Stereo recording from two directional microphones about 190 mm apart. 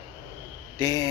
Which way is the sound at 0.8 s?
20° left (ahead or behind).